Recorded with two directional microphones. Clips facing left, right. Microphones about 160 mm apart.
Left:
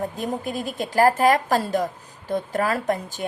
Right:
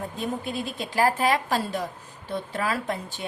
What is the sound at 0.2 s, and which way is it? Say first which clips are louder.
A woman's voice: left 2 dB; 45° left (ahead or behind).